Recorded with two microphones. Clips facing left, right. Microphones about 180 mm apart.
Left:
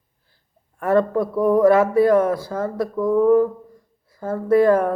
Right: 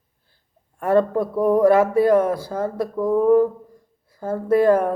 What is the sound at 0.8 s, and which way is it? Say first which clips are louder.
Speech: even; 30° right (ahead or behind).